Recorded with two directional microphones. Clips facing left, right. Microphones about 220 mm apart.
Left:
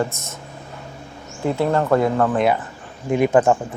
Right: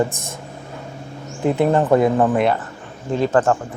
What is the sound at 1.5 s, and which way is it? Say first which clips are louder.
Speech: right 3 dB; 20° right (ahead or behind).